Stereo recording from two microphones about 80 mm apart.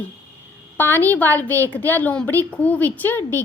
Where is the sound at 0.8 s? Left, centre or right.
Left.